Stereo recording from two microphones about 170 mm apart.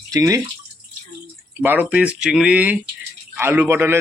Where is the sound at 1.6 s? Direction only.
10° right (ahead or behind).